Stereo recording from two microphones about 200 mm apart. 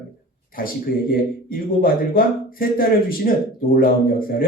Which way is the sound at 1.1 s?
45° left (ahead or behind).